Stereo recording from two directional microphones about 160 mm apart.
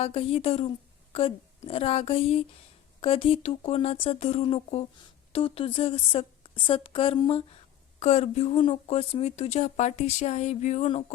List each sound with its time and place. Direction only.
0.0 s a woman's voice: 40° left (ahead or behind)